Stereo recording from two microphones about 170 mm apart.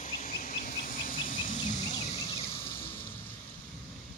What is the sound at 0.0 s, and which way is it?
Insect, 45° left (ahead or behind).